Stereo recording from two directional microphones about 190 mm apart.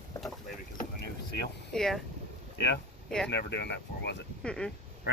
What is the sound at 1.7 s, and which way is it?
Speech, centre (ahead or behind).